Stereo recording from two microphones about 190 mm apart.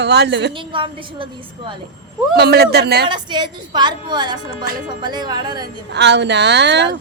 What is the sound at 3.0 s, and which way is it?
A woman's voice, 25° right (ahead or behind).